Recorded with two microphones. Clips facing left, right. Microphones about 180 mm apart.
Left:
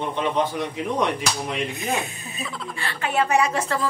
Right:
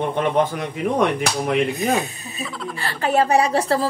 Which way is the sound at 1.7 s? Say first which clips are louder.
Right 6 dB; 35° right (ahead or behind).